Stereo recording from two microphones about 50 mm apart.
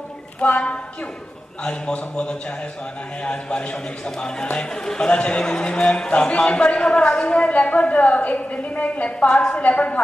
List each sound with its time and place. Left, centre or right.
0.4 s a man's voice: left